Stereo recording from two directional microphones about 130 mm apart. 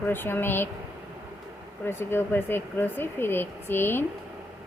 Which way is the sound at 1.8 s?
20° left (ahead or behind).